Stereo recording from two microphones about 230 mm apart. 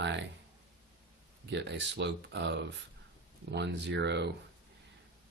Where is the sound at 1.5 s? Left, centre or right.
Right.